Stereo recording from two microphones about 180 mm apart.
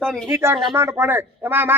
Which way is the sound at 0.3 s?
15° right (ahead or behind).